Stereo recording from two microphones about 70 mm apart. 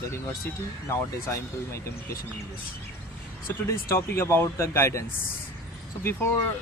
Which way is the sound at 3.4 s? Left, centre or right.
Left.